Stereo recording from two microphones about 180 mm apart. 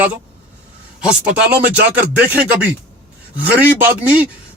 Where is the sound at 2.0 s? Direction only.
10° right (ahead or behind).